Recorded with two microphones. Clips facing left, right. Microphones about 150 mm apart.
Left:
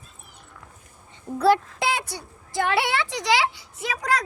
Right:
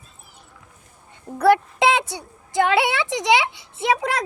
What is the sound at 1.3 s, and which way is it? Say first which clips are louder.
A woman's voice: right 3 dB; 15° right (ahead or behind).